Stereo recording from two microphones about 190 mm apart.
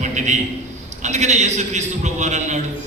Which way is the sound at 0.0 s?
40° right (ahead or behind).